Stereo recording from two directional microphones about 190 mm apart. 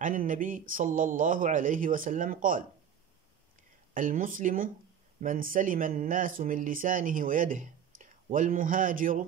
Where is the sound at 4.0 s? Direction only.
45° right (ahead or behind).